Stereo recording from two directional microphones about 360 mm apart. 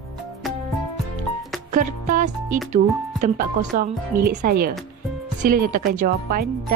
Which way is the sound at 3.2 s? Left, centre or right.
Right.